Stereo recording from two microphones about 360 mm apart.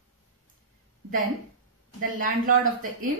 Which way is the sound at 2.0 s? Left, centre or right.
Right.